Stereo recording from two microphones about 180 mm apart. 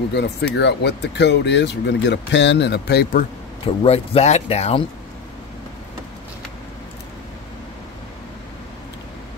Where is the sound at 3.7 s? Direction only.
35° left (ahead or behind).